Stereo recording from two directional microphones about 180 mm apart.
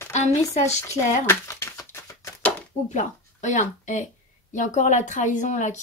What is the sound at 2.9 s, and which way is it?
Speech, 45° left (ahead or behind).